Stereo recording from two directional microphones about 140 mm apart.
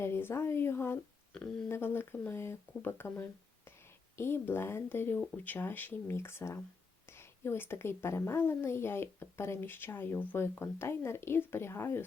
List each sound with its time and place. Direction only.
0.0 s a woman's voice: 15° left (ahead or behind)